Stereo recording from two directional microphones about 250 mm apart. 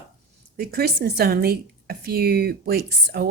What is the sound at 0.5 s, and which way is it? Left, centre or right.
Speech, right.